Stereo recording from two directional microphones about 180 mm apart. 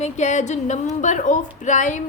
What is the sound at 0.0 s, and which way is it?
A woman's voice, 40° left (ahead or behind).